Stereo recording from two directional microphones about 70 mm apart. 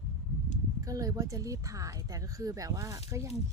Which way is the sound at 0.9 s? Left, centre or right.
Right.